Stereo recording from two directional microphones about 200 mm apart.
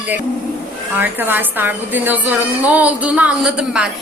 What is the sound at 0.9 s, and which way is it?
A woman's voice, 10° right (ahead or behind).